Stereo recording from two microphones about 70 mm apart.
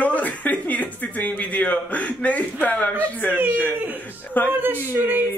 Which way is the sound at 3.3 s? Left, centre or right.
Right.